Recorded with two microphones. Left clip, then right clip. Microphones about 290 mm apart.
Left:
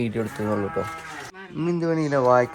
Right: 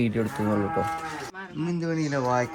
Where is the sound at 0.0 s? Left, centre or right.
Centre.